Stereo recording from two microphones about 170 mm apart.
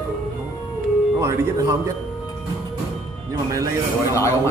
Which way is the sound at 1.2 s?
20° right (ahead or behind).